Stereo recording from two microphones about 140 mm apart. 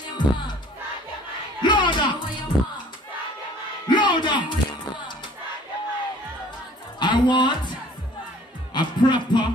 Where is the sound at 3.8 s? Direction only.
35° left (ahead or behind).